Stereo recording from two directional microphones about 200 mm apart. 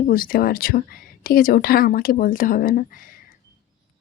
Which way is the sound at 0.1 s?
45° left (ahead or behind).